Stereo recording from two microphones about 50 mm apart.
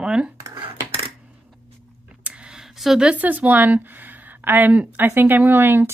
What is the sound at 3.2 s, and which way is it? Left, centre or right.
A woman's voice, right.